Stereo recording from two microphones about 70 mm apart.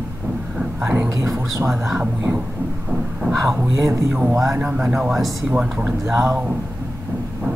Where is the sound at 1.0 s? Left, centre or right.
Right.